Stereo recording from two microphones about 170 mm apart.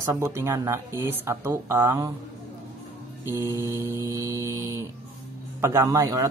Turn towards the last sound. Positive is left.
turn(degrees=-20)  # may be behind; listen again after turning